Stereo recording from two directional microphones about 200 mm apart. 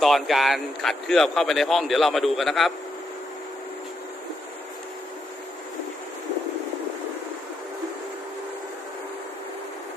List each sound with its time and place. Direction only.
0.0 s speech: centre (ahead or behind)